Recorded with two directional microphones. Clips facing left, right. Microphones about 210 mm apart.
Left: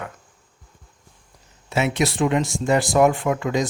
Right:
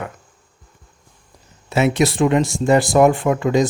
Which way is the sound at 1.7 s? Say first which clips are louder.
Right 5 dB; 40° right (ahead or behind).